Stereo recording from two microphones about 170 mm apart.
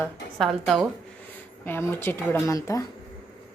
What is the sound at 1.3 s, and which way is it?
Speech, 10° left (ahead or behind).